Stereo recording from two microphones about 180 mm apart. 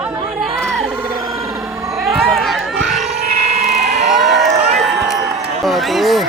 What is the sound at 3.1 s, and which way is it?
Sheep, 35° right (ahead or behind).